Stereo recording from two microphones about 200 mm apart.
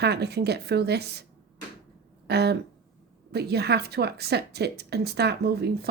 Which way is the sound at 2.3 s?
55° right (ahead or behind).